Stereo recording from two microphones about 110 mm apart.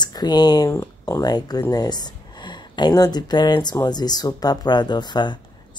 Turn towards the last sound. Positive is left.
turn(degrees=40)  # may be behind; listen again after turning